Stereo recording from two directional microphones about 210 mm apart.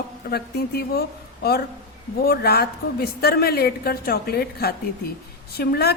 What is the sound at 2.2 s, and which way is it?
Speech, 50° left (ahead or behind).